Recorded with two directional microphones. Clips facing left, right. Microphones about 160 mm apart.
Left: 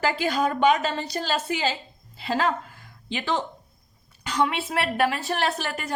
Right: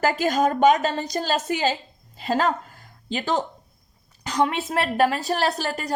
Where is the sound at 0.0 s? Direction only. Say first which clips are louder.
Right 3 dB; 45° right (ahead or behind).